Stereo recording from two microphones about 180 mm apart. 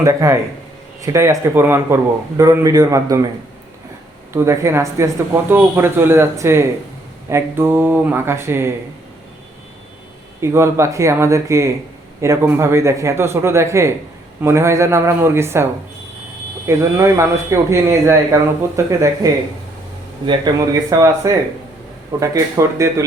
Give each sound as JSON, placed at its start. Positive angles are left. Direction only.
{"t": 0.0, "sound": "speech", "side_deg": -15}
{"t": 4.3, "sound": "speech", "side_deg": -15}
{"t": 10.4, "sound": "speech", "side_deg": -15}
{"t": 16.6, "sound": "speech", "side_deg": -15}